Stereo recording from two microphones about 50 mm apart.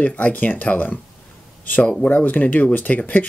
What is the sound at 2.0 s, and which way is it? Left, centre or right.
Speech, left.